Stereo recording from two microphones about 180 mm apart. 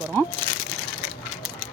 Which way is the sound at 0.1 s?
10° left (ahead or behind).